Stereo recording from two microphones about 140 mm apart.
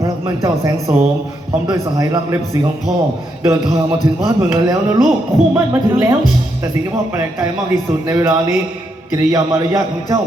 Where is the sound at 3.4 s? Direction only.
20° right (ahead or behind).